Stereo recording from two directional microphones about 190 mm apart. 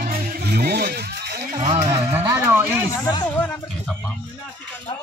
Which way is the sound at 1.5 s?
40° right (ahead or behind).